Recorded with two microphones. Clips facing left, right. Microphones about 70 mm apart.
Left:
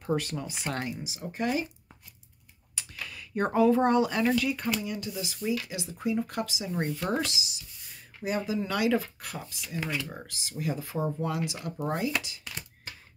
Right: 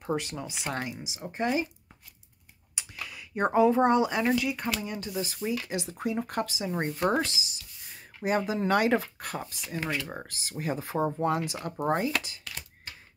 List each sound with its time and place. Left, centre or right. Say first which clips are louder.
0.0 s speech: left 1 dB; centre
2.7 s a sound: even; centre
4.3 s speech: even; centre
4.8 s speech: right 1 dB; right
8.2 s speech: right 3 dB; right
9.8 s speech: right 1 dB; centre
10.2 s speech: even; right